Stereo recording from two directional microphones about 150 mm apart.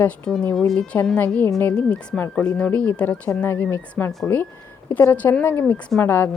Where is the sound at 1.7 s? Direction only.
5° left (ahead or behind).